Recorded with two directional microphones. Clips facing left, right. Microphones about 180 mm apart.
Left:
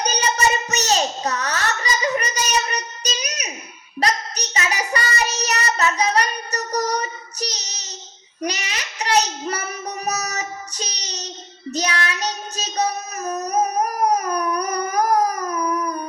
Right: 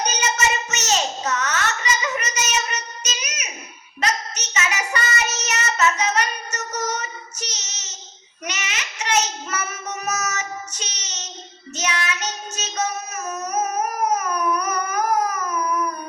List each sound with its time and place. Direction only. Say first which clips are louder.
0.0 s child singing: left 2 dB; 35° left (ahead or behind)